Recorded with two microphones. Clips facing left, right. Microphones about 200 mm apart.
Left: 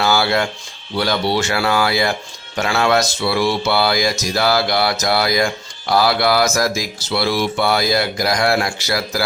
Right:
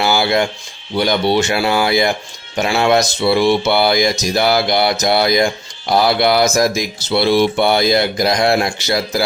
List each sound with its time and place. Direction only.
0.0 s music: 15° right (ahead or behind)
0.9 s speech: 20° right (ahead or behind)